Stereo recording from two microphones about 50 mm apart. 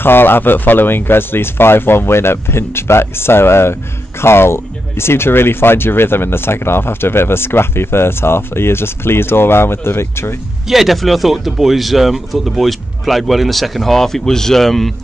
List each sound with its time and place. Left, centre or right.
0.0 s speech: left
10.7 s speech: centre